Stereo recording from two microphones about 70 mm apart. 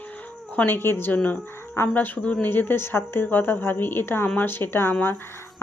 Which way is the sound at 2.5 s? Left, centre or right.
Left.